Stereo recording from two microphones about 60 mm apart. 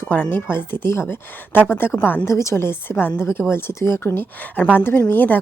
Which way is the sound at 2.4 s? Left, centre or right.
Left.